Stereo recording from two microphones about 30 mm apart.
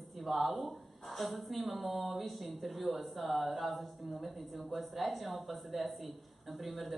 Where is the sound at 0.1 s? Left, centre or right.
Centre.